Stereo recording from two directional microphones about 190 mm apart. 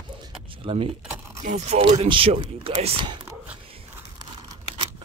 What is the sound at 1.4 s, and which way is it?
Speech, 35° right (ahead or behind).